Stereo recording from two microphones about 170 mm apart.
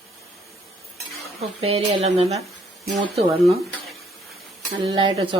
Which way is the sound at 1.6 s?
35° right (ahead or behind).